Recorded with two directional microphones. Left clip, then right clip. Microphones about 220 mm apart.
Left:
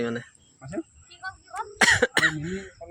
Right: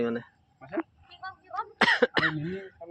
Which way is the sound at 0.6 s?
15° left (ahead or behind).